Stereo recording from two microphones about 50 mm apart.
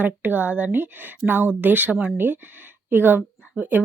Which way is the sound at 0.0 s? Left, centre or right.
Right.